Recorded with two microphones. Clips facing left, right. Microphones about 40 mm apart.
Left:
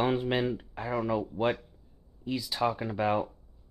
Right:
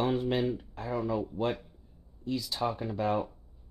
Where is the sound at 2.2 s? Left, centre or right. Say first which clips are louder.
Left 2 dB; centre.